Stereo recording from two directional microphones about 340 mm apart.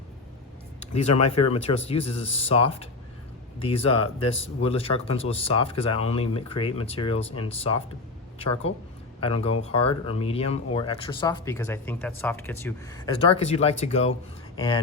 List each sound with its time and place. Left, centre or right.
1.1 s speech: left
1.6 s speech: centre
3.9 s speech: left
4.4 s speech: centre